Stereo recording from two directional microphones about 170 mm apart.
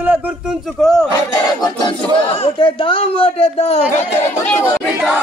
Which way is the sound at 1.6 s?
25° left (ahead or behind).